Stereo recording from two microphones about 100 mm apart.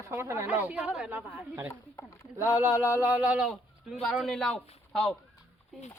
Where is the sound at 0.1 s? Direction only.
30° right (ahead or behind).